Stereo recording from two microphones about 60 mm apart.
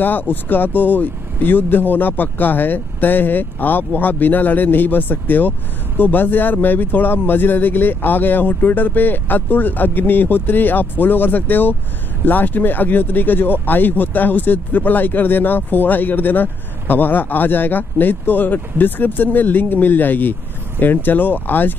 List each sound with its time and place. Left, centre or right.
0.0 s speech: left